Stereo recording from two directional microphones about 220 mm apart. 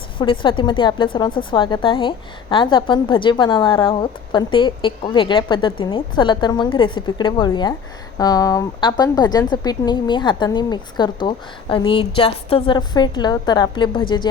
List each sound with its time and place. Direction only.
0.2 s a woman's voice: 20° left (ahead or behind)